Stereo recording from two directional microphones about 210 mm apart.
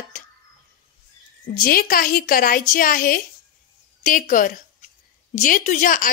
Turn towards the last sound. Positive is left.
turn(degrees=40)  # may be behind; listen again after turning